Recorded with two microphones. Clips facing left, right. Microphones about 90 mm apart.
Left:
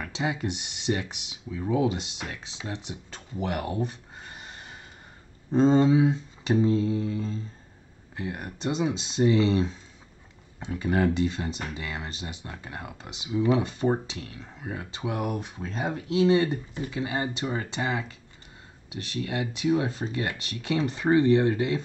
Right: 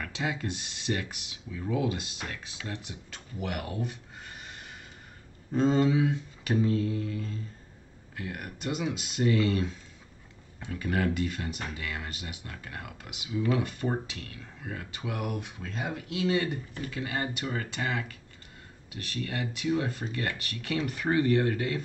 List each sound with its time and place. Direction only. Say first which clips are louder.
0.0 s speech: left 3 dB; 15° left (ahead or behind)